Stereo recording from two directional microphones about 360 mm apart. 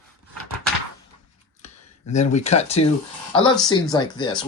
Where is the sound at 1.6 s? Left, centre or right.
Centre.